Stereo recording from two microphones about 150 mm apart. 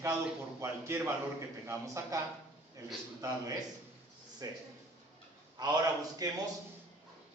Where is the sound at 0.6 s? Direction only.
15° right (ahead or behind).